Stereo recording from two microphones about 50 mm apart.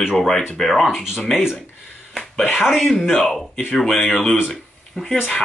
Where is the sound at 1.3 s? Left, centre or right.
Centre.